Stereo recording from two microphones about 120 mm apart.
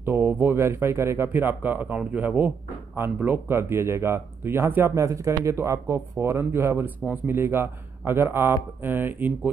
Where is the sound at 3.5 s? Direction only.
20° right (ahead or behind).